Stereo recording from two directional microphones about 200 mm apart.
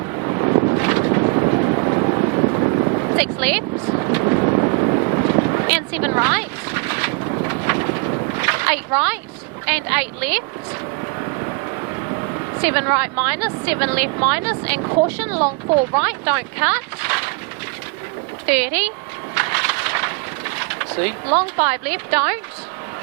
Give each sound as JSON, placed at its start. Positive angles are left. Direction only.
{"t": 0.2, "sound": "vehicle", "side_deg": -20}
{"t": 3.2, "sound": "speech", "side_deg": -10}
{"t": 3.8, "sound": "vehicle", "side_deg": -25}
{"t": 5.6, "sound": "speech", "side_deg": -10}
{"t": 7.4, "sound": "vehicle", "side_deg": -15}
{"t": 8.4, "sound": "a sound", "side_deg": -10}
{"t": 9.6, "sound": "a woman's voice", "side_deg": -10}
{"t": 12.6, "sound": "a woman's voice", "side_deg": -10}
{"t": 15.4, "sound": "speech", "side_deg": -30}
{"t": 16.0, "sound": "a woman's voice", "side_deg": -10}
{"t": 18.4, "sound": "a woman's voice", "side_deg": -10}
{"t": 19.3, "sound": "a sound", "side_deg": -10}
{"t": 21.3, "sound": "a woman's voice", "side_deg": -10}